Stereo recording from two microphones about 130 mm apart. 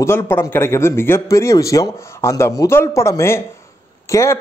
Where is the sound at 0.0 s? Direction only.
20° left (ahead or behind).